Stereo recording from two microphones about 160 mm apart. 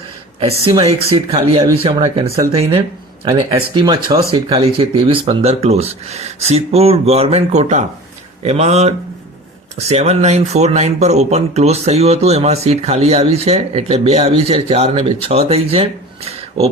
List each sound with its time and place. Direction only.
0.3 s speech: 35° right (ahead or behind)